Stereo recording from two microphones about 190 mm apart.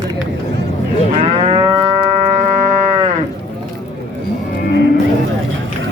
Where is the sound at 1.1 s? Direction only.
30° right (ahead or behind).